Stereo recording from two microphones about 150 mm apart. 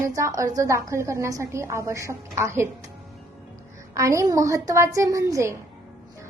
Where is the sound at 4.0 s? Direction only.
20° right (ahead or behind).